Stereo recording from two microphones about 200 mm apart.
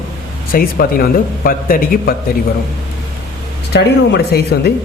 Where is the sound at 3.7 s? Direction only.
55° left (ahead or behind).